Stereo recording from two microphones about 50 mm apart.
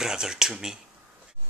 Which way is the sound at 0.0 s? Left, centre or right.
Centre.